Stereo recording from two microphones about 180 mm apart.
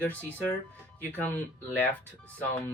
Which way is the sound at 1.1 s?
10° left (ahead or behind).